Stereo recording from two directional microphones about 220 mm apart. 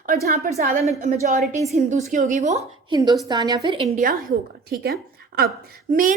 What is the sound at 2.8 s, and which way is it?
A woman's voice, 20° right (ahead or behind).